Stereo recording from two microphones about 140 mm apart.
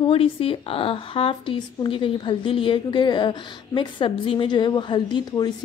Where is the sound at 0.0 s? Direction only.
40° left (ahead or behind).